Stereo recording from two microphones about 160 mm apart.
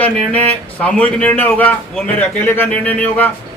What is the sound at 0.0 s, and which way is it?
A man's voice, 10° left (ahead or behind).